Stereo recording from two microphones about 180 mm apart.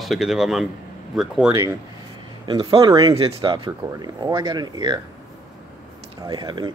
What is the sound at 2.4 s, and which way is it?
Speech, 25° right (ahead or behind).